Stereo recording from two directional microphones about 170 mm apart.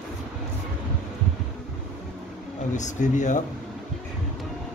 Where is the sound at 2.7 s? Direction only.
45° left (ahead or behind).